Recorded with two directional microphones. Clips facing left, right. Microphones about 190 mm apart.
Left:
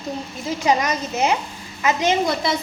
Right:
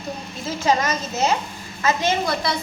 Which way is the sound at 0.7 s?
15° left (ahead or behind).